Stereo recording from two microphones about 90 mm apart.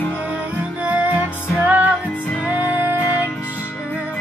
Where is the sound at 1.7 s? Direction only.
15° right (ahead or behind).